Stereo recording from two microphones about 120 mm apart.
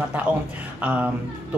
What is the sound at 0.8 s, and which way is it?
Speech, 10° right (ahead or behind).